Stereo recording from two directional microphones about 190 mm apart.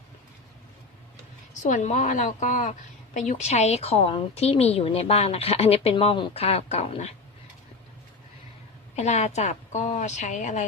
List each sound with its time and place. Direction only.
1.7 s a woman's voice: 35° left (ahead or behind)
9.0 s a woman's voice: 35° left (ahead or behind)